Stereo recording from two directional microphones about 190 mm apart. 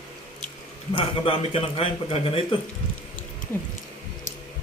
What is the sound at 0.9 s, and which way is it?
A man's voice, 30° left (ahead or behind).